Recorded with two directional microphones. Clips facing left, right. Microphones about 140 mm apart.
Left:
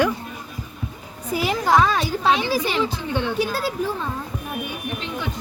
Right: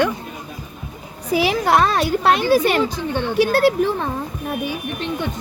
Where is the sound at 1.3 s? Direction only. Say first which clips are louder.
Right 2 dB; 80° right; by 2.4 s 65° right (ahead or behind).